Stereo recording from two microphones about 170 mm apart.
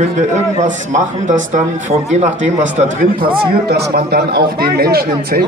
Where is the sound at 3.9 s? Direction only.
65° right (ahead or behind).